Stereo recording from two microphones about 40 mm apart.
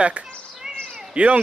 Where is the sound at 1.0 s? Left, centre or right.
Right.